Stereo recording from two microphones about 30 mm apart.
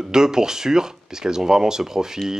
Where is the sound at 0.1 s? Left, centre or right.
Right.